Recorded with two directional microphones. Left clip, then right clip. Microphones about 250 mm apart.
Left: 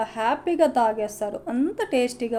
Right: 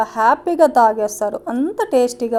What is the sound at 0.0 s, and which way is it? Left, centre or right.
A woman's voice, right.